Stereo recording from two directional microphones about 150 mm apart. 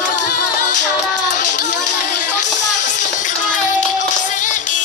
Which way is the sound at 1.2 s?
55° left (ahead or behind).